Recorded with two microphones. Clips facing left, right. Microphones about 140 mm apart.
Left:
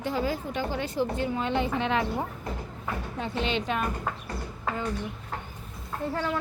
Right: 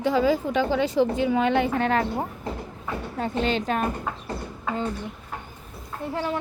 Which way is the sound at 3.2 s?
45° right (ahead or behind).